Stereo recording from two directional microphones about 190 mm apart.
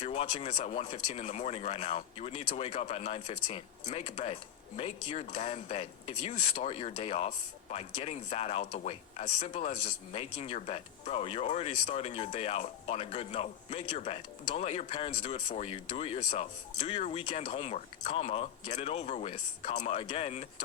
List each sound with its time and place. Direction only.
0.0 s speech: 30° left (ahead or behind)